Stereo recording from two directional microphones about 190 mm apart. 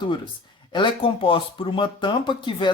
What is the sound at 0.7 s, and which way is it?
Speech, 25° left (ahead or behind).